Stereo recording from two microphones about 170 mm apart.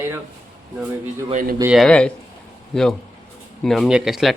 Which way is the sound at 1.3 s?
55° right (ahead or behind).